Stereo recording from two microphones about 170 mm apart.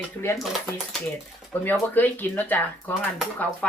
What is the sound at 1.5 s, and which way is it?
Speech, 10° left (ahead or behind).